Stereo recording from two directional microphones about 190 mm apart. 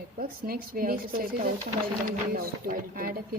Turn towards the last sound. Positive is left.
turn(degrees=-50)  # may be behind; listen again after turning